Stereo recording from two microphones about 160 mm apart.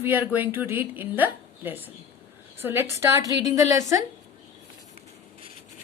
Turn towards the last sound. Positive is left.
turn(degrees=-20)  # may be behind; listen again after turning